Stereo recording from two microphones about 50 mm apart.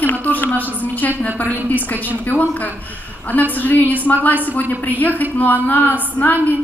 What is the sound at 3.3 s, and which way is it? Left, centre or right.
Speech, left.